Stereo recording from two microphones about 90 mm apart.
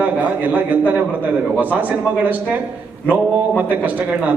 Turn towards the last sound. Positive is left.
turn(degrees=-20)  # may be behind; listen again after turning